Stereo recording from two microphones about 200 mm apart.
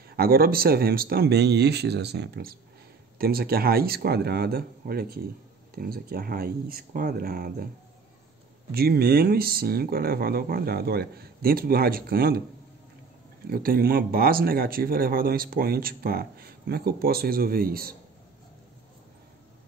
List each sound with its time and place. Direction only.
0.1 s speech: 50° right (ahead or behind)
8.7 s speech: 50° right (ahead or behind)
13.5 s speech: 45° right (ahead or behind)